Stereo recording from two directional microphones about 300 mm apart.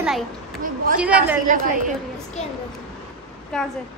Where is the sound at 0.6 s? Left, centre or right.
Right.